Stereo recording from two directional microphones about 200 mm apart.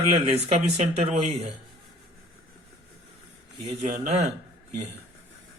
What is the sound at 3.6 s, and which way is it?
Speech, 30° right (ahead or behind).